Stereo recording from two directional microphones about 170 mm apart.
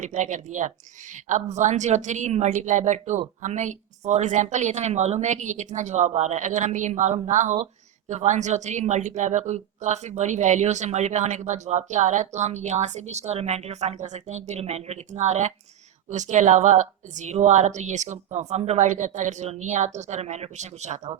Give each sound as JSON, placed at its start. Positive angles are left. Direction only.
{"t": 0.0, "sound": "a woman's voice", "side_deg": -45}